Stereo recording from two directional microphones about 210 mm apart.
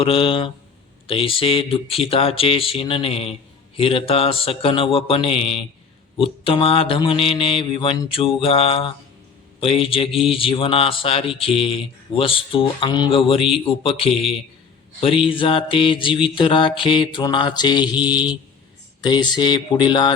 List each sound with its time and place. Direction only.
0.0 s mantra: 25° left (ahead or behind)
10.1 s mantra: centre (ahead or behind)
10.3 s mantra: 25° left (ahead or behind)
14.1 s mantra: centre (ahead or behind)
15.3 s mantra: 25° left (ahead or behind)
17.9 s mantra: 5° right (ahead or behind)
19.0 s mantra: 20° left (ahead or behind)